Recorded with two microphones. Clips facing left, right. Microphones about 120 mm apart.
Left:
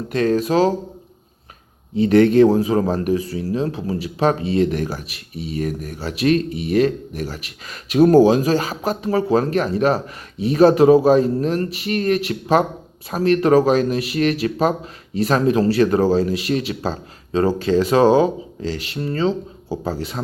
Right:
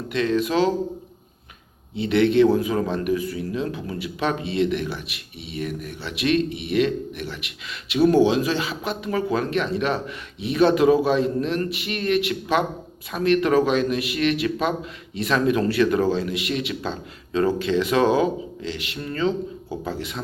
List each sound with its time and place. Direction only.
0.1 s speech: 40° left (ahead or behind)
2.0 s speech: 40° left (ahead or behind)